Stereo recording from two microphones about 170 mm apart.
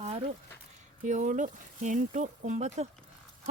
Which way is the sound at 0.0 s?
35° right (ahead or behind).